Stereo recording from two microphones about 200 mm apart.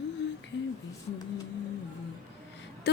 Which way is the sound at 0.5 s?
65° left (ahead or behind).